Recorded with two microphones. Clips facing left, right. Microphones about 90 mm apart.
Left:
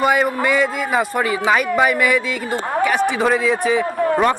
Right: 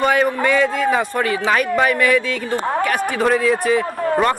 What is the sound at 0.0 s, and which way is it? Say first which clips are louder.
A man's voice: even; 10° left (ahead or behind).